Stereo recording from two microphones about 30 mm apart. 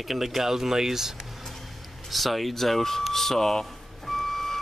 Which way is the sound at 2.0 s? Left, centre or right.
Centre.